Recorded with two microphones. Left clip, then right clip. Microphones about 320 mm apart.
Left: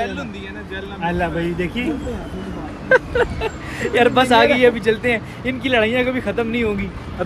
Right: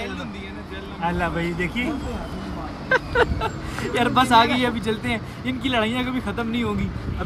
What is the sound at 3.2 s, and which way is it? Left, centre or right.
Speech, right.